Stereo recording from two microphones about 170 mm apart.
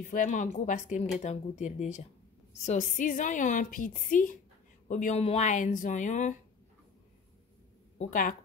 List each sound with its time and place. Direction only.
0.0 s a woman's voice: 50° left (ahead or behind)
8.0 s a woman's voice: 50° left (ahead or behind)